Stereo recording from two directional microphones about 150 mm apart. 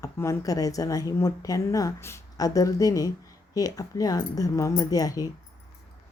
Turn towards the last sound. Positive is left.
turn(degrees=25)  # may be behind; listen again after turning